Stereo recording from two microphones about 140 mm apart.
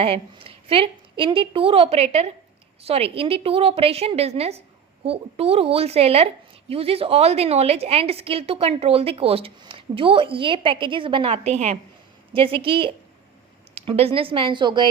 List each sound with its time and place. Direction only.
0.0 s a woman's voice: 40° right (ahead or behind)
12.3 s a woman's voice: 40° right (ahead or behind)